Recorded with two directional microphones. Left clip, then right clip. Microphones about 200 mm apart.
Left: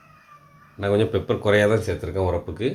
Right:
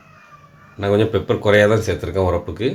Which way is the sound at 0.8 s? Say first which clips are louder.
Right 4 dB; 5° left (ahead or behind).